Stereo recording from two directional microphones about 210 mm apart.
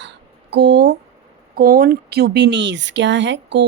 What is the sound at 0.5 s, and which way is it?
Speech, 50° right (ahead or behind).